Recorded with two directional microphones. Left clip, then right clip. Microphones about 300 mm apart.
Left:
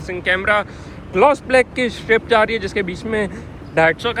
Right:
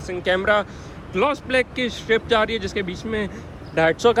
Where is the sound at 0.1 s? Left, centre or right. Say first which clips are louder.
Left 2 dB; centre.